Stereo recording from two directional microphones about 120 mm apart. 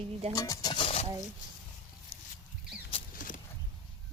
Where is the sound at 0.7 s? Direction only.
55° left (ahead or behind).